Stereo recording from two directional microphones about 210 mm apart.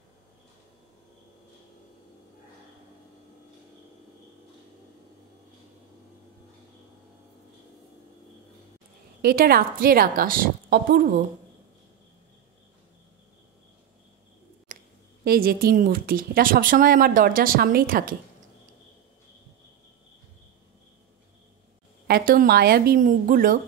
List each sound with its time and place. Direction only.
9.2 s a woman's voice: 45° right (ahead or behind)
14.7 s a sound: 40° right (ahead or behind)
15.2 s a woman's voice: 45° right (ahead or behind)
22.0 s a woman's voice: 45° right (ahead or behind)